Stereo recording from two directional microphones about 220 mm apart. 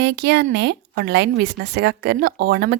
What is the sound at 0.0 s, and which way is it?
Speech, 50° right (ahead or behind).